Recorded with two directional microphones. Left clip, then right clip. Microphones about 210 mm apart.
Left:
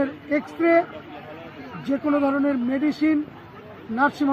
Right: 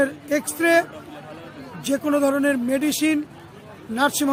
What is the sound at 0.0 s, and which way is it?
Speech, 35° right (ahead or behind).